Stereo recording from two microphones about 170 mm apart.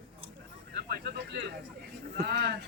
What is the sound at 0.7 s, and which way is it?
Speech, 65° right (ahead or behind).